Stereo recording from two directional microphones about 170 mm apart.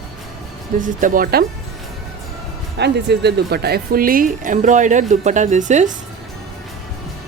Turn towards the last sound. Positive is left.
turn(degrees=-45)  # may be behind; listen again after turning